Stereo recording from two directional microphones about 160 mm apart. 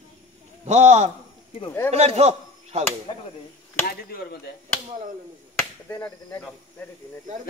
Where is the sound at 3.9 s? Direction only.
65° left (ahead or behind).